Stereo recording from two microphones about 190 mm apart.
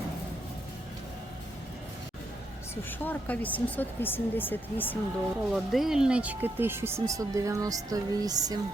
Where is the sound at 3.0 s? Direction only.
10° left (ahead or behind).